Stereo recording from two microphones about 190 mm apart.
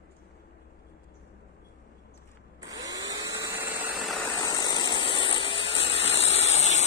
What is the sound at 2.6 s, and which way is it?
Tools, 20° right (ahead or behind).